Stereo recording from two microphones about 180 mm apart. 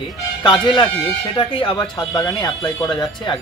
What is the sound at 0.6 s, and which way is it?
Speech, 25° left (ahead or behind).